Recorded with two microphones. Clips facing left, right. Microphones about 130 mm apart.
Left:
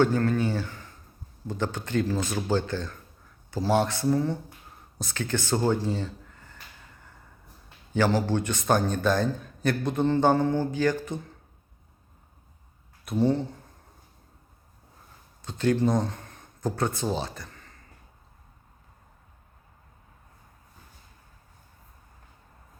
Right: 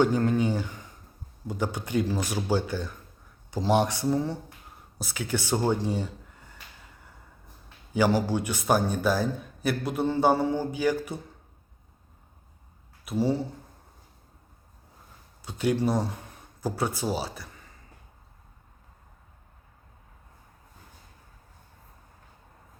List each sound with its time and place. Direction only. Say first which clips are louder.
0.0 s a man's voice: even; 15° right (ahead or behind)
7.9 s a man's voice: even; 10° right (ahead or behind)
13.1 s speech: left 2 dB; 5° right (ahead or behind)
15.4 s speech: left 2 dB; 10° right (ahead or behind)